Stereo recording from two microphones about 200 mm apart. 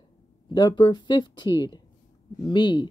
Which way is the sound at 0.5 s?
20° left (ahead or behind).